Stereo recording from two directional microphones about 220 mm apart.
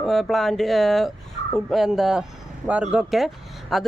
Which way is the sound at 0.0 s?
Centre (ahead or behind).